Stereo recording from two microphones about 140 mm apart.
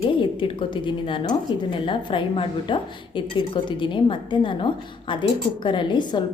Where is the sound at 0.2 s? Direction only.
35° left (ahead or behind).